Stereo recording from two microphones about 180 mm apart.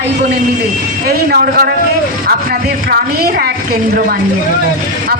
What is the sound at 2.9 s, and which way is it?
Speech, 60° right (ahead or behind).